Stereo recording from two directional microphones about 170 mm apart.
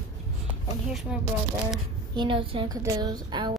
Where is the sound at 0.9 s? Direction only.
Centre (ahead or behind).